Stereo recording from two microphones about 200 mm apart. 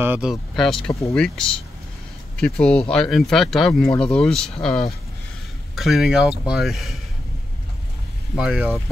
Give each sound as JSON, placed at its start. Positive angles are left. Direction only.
{"t": 0.0, "sound": "speech", "side_deg": -5}
{"t": 8.4, "sound": "speech", "side_deg": -5}